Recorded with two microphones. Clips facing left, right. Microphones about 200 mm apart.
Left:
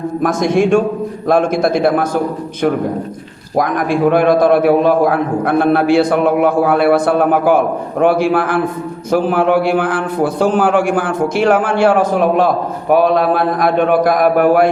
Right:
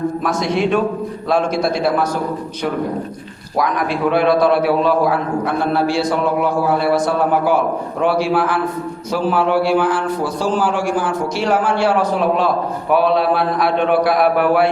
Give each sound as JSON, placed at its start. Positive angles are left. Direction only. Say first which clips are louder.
{"t": 0.2, "sound": "a man's voice", "louder": "left 9 dB", "side_deg": 50}
{"t": 3.6, "sound": "a man's voice", "louder": "left 4 dB", "side_deg": 50}